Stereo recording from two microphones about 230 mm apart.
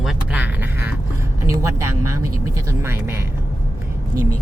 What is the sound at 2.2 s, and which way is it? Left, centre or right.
Speech, right.